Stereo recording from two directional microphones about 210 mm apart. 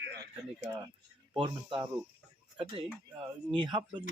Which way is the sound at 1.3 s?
20° right (ahead or behind).